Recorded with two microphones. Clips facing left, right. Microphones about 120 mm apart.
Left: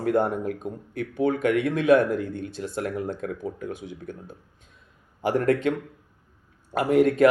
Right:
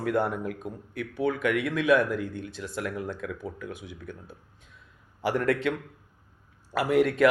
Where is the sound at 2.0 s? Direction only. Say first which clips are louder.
Left 4 dB; 50° left (ahead or behind).